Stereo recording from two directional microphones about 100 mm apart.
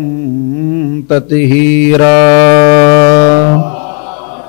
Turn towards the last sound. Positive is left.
turn(degrees=15)  # may be behind; listen again after turning